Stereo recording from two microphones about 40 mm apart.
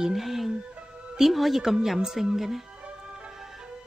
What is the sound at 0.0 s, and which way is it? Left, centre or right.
A woman's voice, centre.